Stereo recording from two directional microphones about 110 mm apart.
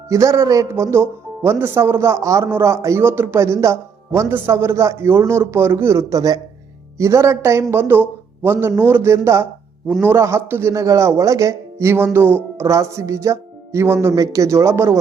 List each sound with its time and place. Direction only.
0.1 s speech: 30° right (ahead or behind)